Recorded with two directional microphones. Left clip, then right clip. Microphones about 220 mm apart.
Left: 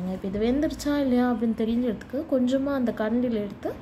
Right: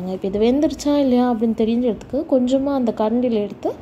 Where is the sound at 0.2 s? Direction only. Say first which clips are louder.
Right 8 dB; 20° right (ahead or behind).